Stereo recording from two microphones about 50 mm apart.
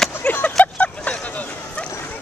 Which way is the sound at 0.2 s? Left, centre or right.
Left.